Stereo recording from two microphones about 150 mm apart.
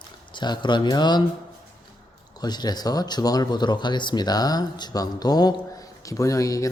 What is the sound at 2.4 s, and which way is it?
Speech, 30° left (ahead or behind).